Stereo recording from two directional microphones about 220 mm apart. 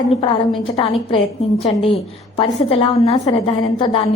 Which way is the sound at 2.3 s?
25° left (ahead or behind).